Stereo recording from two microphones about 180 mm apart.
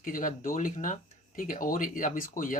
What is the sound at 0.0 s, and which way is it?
Speech, 50° left (ahead or behind).